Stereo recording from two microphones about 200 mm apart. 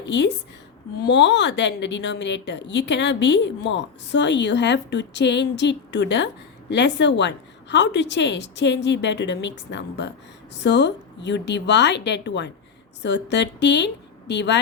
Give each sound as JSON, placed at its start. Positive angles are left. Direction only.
{"t": 0.0, "sound": "a woman's voice", "side_deg": 60}